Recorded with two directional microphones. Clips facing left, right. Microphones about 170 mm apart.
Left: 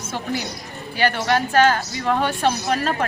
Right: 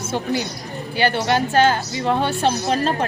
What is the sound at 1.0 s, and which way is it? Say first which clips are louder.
Speech: right 1 dB; 30° right (ahead or behind).